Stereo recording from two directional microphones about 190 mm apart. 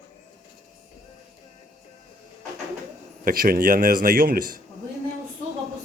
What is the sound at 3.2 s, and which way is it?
A man's voice, 50° right (ahead or behind).